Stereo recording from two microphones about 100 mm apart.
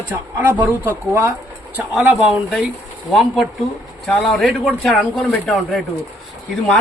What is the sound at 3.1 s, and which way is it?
A man's voice, centre (ahead or behind).